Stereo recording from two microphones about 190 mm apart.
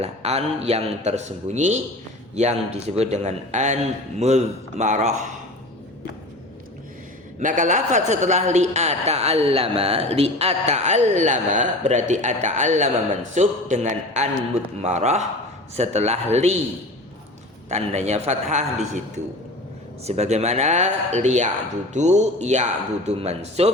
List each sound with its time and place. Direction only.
0.0 s a man's voice: 35° right (ahead or behind)
7.3 s a man's voice: 40° right (ahead or behind)
17.7 s a man's voice: 35° right (ahead or behind)